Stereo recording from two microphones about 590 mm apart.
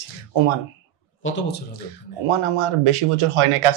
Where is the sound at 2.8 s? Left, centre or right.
Right.